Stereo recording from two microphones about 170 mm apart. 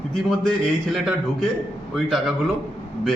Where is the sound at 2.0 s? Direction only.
Centre (ahead or behind).